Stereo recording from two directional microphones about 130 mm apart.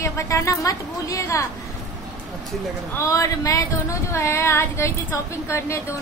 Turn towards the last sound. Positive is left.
turn(degrees=20)  # may be behind; listen again after turning